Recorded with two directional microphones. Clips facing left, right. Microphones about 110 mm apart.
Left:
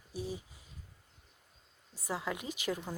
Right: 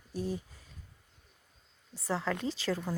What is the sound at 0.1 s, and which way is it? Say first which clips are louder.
Speech: right 4 dB; 10° left (ahead or behind).